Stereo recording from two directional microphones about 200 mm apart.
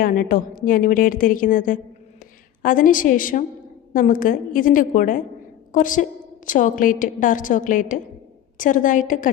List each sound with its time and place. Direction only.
0.0 s a woman's voice: 45° left (ahead or behind)